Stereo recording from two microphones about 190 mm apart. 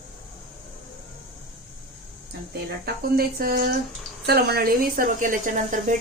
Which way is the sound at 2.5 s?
55° right (ahead or behind).